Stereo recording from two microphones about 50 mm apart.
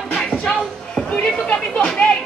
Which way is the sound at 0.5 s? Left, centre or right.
Centre.